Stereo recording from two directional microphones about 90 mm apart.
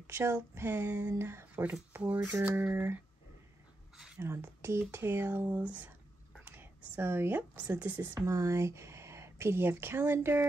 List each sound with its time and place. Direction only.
0.0 s speech: 30° right (ahead or behind)
4.2 s speech: 30° right (ahead or behind)
8.0 s speech: 30° right (ahead or behind)